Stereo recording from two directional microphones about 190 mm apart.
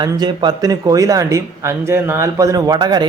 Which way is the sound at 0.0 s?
20° right (ahead or behind).